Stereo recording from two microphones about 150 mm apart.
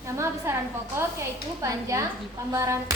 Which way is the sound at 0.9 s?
20° right (ahead or behind).